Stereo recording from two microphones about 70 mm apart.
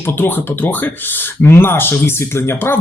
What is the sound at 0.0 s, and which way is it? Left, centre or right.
Speech, left.